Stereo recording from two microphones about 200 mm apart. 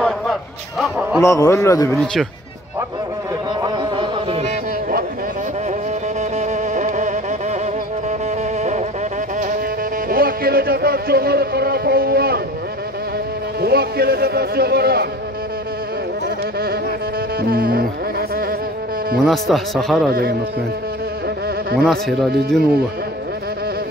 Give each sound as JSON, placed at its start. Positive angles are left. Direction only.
{"t": 0.0, "sound": "a sound", "side_deg": 0}
{"t": 1.2, "sound": "a man's voice", "side_deg": 15}
{"t": 3.6, "sound": "a sound", "side_deg": -20}
{"t": 6.3, "sound": "music", "side_deg": -35}
{"t": 10.0, "sound": "music", "side_deg": -50}
{"t": 13.6, "sound": "speech", "side_deg": -50}
{"t": 17.4, "sound": "music", "side_deg": -50}
{"t": 19.1, "sound": "speech", "side_deg": 0}
{"t": 20.1, "sound": "speech", "side_deg": -50}
{"t": 21.8, "sound": "speech", "side_deg": 0}